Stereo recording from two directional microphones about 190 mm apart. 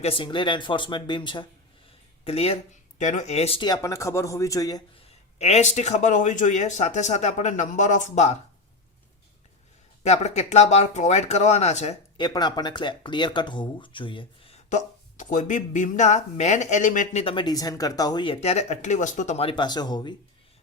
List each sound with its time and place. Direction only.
0.0 s speech: 25° left (ahead or behind)
5.4 s speech: 35° left (ahead or behind)
10.0 s speech: 35° left (ahead or behind)
12.1 s speech: 25° left (ahead or behind)